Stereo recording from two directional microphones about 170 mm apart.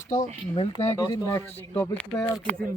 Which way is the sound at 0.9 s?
20° left (ahead or behind).